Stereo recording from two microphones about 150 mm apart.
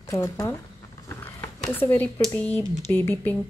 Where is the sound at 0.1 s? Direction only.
20° left (ahead or behind).